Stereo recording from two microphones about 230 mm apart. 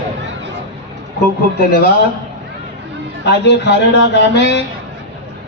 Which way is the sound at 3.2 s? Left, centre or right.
Left.